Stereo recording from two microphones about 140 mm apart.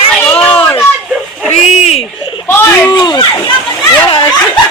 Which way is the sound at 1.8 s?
45° left (ahead or behind).